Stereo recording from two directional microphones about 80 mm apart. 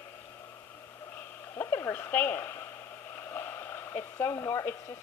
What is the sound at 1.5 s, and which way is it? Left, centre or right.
Speech, left.